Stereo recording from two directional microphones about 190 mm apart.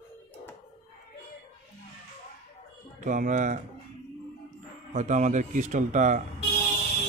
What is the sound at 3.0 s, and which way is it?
Speech, 40° right (ahead or behind).